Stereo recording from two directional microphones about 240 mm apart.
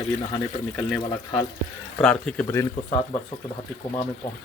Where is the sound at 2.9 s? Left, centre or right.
Left.